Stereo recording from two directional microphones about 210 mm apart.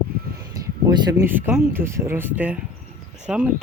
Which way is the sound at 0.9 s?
20° right (ahead or behind).